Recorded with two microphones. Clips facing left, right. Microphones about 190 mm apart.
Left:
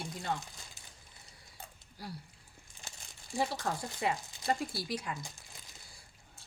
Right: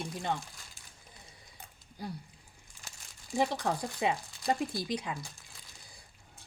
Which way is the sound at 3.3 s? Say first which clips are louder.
Right 4 dB; 20° right (ahead or behind).